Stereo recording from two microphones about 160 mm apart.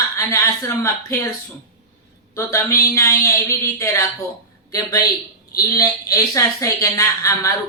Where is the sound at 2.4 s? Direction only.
15° left (ahead or behind).